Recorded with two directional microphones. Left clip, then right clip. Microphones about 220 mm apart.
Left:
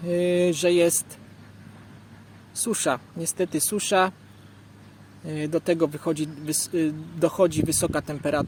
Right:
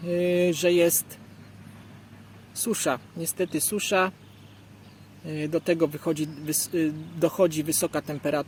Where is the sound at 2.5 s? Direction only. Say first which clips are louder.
Left 2 dB; centre (ahead or behind).